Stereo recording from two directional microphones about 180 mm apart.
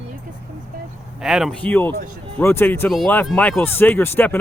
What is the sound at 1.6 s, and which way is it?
Speech, 10° left (ahead or behind).